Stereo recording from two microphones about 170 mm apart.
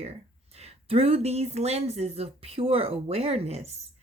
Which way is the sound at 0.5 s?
40° right (ahead or behind).